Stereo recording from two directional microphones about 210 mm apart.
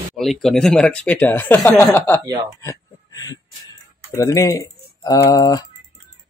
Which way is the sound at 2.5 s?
15° left (ahead or behind).